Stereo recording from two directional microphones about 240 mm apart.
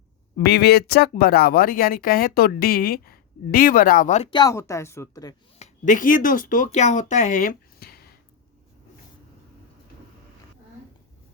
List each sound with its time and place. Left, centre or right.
0.3 s speech: left; by 5.3 s centre
5.5 s speech: left